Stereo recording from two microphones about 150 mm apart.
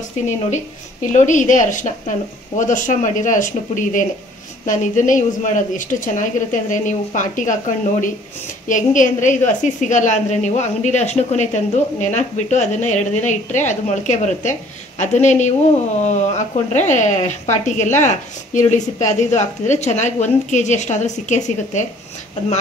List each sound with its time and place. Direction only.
1.0 s a woman's voice: 55° left (ahead or behind)